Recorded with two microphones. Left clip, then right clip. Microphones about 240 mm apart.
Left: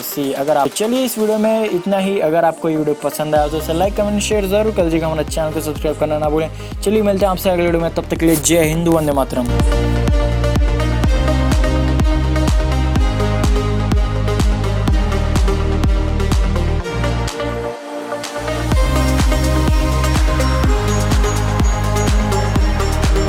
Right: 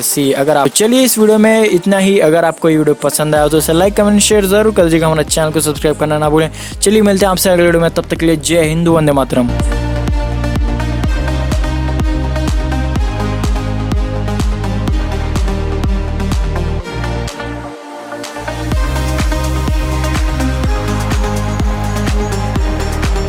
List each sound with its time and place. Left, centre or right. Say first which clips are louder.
0.2 s speech: right 4 dB; right; by 8.9 s centre
8.9 s speech: right 4 dB; right